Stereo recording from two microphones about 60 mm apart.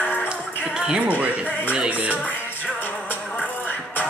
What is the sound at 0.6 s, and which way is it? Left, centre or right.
Music, centre.